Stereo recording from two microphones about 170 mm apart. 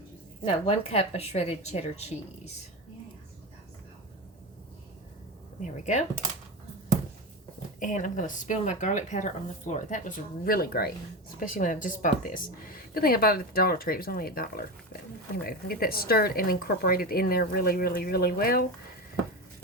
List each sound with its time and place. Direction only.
0.4 s speech: 35° left (ahead or behind)
5.6 s speech: 45° left (ahead or behind)
7.8 s speech: 50° left (ahead or behind)
11.3 s speech: 50° left (ahead or behind)